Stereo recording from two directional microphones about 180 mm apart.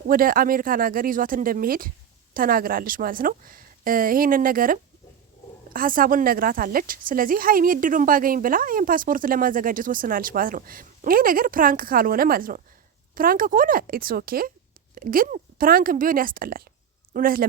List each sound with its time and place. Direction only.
0.1 s speech: 50° right (ahead or behind)